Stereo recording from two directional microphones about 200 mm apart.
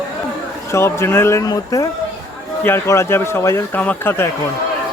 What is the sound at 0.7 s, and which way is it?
A man's voice, 15° left (ahead or behind).